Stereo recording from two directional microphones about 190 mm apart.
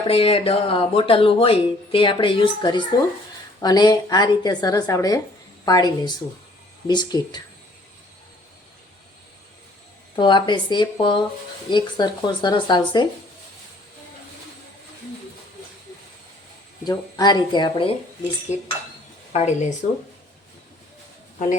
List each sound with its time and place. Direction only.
0.1 s a woman's voice: 30° left (ahead or behind)
10.2 s speech: 25° left (ahead or behind)
16.8 s speech: 20° left (ahead or behind)
18.5 s dishes: 35° left (ahead or behind)
19.3 s speech: 35° left (ahead or behind)